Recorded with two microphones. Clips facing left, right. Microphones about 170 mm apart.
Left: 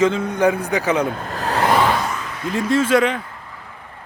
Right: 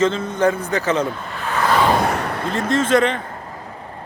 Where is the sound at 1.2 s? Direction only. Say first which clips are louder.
Left 2 dB; 40° left (ahead or behind).